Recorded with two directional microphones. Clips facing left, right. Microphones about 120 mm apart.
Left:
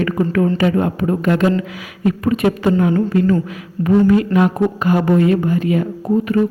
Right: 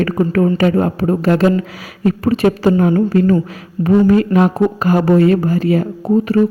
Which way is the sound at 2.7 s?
45° right (ahead or behind).